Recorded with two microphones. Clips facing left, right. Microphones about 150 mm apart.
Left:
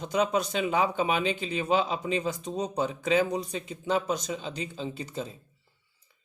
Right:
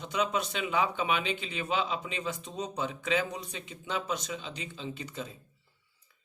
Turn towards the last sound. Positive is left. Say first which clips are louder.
# left 4 dB
turn(degrees=35)  # may be behind; listen again after turning